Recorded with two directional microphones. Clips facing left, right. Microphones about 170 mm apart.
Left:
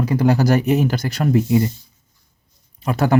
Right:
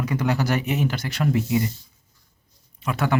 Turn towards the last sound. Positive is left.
turn(degrees=40)  # may be behind; listen again after turning